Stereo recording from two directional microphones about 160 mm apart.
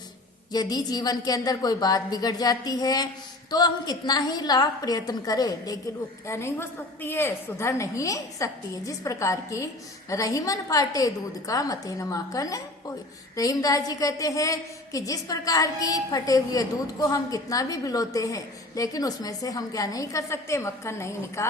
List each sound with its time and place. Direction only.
0.5 s a woman's voice: 25° left (ahead or behind)